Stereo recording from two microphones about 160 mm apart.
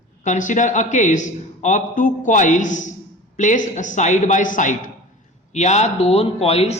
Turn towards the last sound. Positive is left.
turn(degrees=40)  # may be behind; listen again after turning